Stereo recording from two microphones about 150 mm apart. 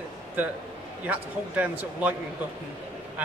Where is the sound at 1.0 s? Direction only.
10° right (ahead or behind).